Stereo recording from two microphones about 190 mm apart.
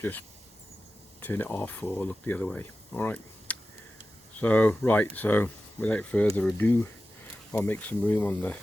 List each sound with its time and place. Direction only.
0.0 s speech: 10° left (ahead or behind)